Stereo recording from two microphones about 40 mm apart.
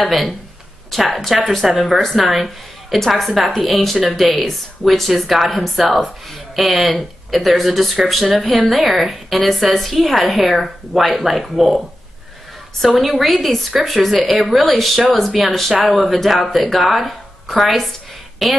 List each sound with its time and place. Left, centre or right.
0.0 s speech: centre
13.2 s speech: centre